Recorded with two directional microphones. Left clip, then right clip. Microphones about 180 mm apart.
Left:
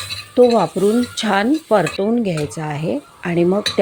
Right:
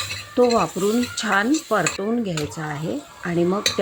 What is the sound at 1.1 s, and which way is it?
Stir, 30° left (ahead or behind).